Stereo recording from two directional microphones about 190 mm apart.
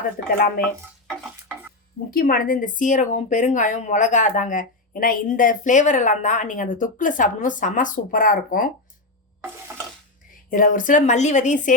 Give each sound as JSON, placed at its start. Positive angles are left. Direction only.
{"t": 0.3, "sound": "a woman's voice", "side_deg": 50}
{"t": 2.0, "sound": "a woman's voice", "side_deg": 50}
{"t": 10.5, "sound": "a woman's voice", "side_deg": 45}